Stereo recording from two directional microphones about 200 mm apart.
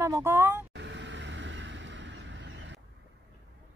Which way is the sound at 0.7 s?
60° right (ahead or behind).